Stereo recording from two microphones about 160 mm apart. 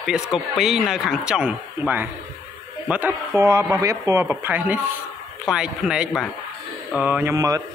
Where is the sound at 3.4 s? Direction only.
20° right (ahead or behind).